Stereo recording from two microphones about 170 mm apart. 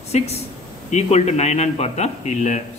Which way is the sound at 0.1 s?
40° left (ahead or behind).